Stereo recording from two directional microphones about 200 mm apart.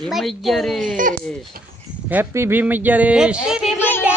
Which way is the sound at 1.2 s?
5° left (ahead or behind).